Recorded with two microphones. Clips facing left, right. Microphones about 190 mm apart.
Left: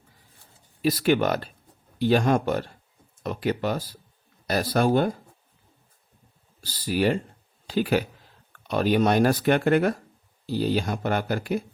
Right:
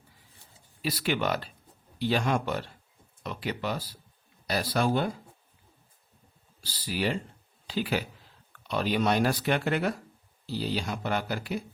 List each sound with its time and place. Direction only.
0.8 s speech: 45° left (ahead or behind)
6.6 s speech: 45° left (ahead or behind)